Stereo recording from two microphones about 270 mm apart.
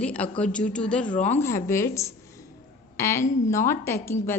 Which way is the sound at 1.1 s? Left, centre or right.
Left.